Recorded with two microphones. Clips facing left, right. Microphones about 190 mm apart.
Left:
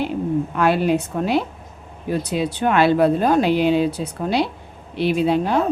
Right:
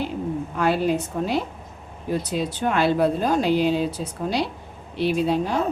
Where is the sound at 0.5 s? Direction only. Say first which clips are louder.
Left 2 dB; 65° left (ahead or behind).